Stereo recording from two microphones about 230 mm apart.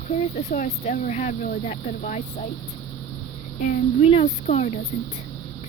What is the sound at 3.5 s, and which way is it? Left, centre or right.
Speech, left.